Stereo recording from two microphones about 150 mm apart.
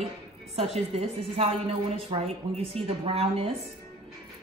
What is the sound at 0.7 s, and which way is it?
A woman's voice, 45° right (ahead or behind).